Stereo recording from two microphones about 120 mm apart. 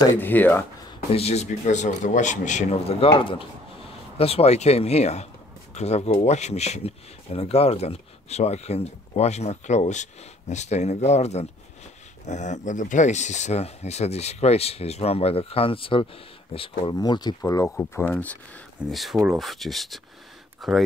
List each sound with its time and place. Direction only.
0.2 s speech: 15° left (ahead or behind)
1.1 s speech: 60° left (ahead or behind); by 2.8 s 90° left
2.9 s speech: 50° left (ahead or behind); by 11.4 s 65° left (ahead or behind)
12.3 s speech: 80° left; by 16.9 s 50° left (ahead or behind)
16.9 s speech: 35° left (ahead or behind)
17.9 s speech: 15° left (ahead or behind)
18.9 s speech: centre (ahead or behind)